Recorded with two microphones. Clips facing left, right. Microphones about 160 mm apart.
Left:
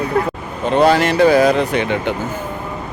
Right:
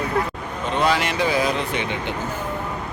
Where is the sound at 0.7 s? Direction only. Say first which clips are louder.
Left 8 dB; 45° left (ahead or behind).